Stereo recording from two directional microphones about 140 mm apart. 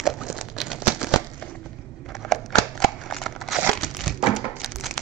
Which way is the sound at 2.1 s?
Centre (ahead or behind).